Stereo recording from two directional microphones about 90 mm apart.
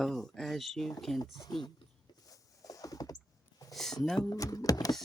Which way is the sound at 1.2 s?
50° left (ahead or behind).